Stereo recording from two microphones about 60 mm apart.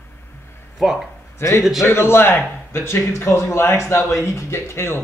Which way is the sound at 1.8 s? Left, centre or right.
Left.